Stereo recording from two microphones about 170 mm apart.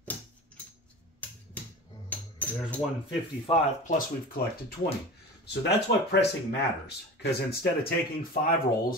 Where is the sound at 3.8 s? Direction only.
50° left (ahead or behind).